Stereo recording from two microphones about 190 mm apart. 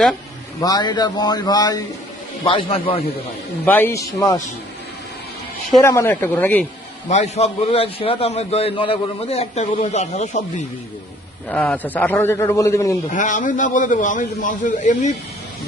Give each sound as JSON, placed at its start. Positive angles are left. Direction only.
{"t": 0.6, "sound": "a man's voice", "side_deg": 20}
{"t": 3.7, "sound": "a man's voice", "side_deg": 10}
{"t": 5.8, "sound": "a man's voice", "side_deg": 15}
{"t": 7.1, "sound": "a man's voice", "side_deg": 35}
{"t": 11.4, "sound": "a man's voice", "side_deg": 5}
{"t": 13.1, "sound": "a man's voice", "side_deg": 45}